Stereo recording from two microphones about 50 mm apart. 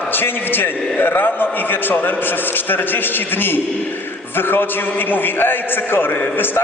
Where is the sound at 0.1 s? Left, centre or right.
Left.